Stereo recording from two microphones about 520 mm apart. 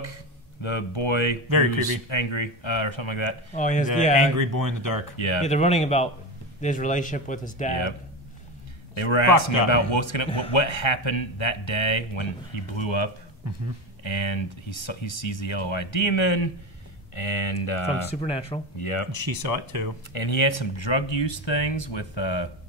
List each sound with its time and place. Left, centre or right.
0.0 s speech: left
3.5 s speech: centre
4.4 s speech: right
5.1 s speech: left
5.4 s speech: centre
8.9 s speech: left
19.1 s speech: right
20.1 s speech: left